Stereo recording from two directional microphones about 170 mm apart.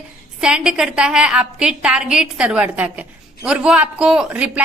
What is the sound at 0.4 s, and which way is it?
A woman's voice, 5° right (ahead or behind).